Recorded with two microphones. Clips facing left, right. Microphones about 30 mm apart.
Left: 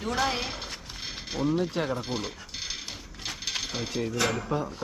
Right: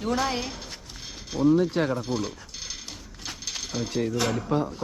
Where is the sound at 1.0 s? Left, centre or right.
Left.